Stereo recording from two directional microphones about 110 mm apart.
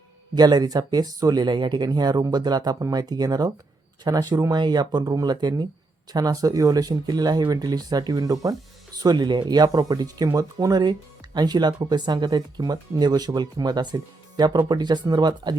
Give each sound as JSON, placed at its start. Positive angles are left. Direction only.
{"t": 0.3, "sound": "speech", "side_deg": -40}